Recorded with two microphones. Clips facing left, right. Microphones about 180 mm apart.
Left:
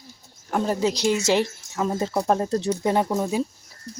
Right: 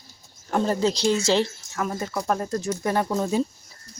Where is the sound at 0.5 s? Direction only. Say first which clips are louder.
Even; 10° left (ahead or behind); by 2.6 s 30° left (ahead or behind).